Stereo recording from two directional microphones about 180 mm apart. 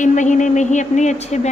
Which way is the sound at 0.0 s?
45° left (ahead or behind).